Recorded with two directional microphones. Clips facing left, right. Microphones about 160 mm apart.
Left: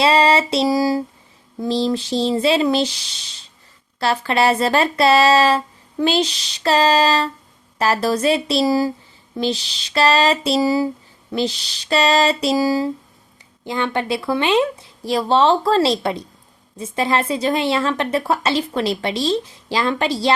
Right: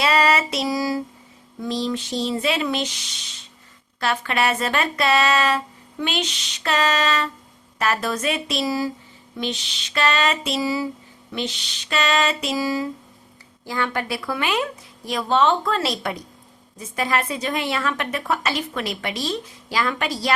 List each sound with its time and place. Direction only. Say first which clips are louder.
0.0 s a woman's voice: left 4 dB; 30° left (ahead or behind)
13.7 s a woman's voice: left 4 dB; 25° left (ahead or behind)